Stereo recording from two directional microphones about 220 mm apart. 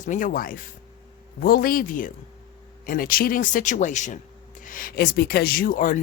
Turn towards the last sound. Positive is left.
turn(degrees=40)  # may be behind; listen again after turning